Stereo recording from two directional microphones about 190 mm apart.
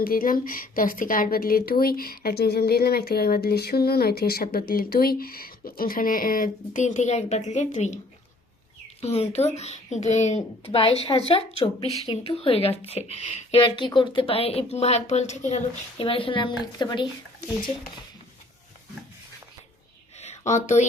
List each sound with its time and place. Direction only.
0.0 s a woman's voice: 50° left (ahead or behind)
9.0 s speech: 35° left (ahead or behind)
20.1 s a sound: 35° left (ahead or behind)